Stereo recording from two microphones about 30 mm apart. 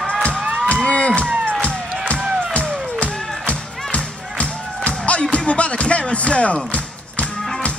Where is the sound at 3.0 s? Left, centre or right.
Left.